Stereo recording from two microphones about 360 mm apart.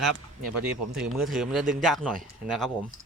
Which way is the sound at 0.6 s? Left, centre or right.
Centre.